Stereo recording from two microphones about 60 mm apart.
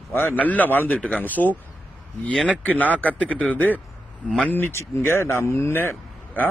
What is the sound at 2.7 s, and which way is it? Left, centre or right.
A man's voice, left.